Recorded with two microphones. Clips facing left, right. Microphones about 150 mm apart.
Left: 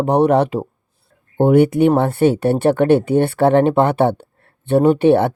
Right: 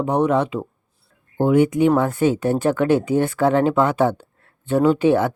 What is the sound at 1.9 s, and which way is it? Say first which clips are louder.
Speech: left 2 dB; 30° left (ahead or behind).